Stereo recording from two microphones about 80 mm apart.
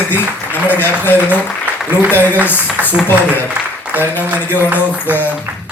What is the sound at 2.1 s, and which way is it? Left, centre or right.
Speech, left.